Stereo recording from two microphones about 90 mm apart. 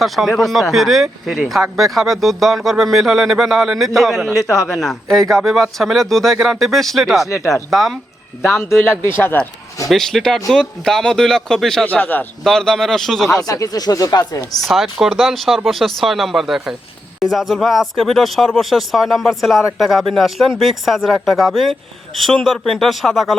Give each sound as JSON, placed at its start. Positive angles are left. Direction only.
{"t": 0.0, "sound": "speech", "side_deg": 0}
{"t": 4.4, "sound": "speech", "side_deg": 40}
{"t": 4.7, "sound": "speech", "side_deg": 0}
{"t": 8.5, "sound": "speech", "side_deg": 25}
{"t": 9.9, "sound": "speech", "side_deg": 5}
{"t": 11.9, "sound": "speech", "side_deg": 20}
{"t": 12.5, "sound": "speech", "side_deg": 5}
{"t": 13.5, "sound": "speech", "side_deg": 45}
{"t": 14.6, "sound": "speech", "side_deg": 0}